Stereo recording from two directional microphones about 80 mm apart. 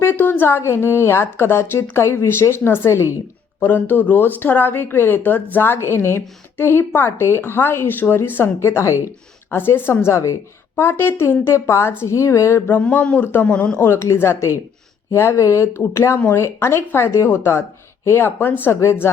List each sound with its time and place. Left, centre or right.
0.0 s a woman's voice: left
12.6 s speech: left
13.8 s a woman's voice: left